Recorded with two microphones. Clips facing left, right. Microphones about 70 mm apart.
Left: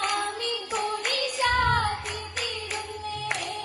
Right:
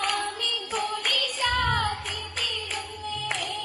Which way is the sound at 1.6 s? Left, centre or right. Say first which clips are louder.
Even; left.